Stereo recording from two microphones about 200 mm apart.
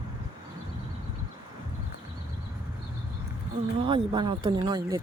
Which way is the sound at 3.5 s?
25° right (ahead or behind).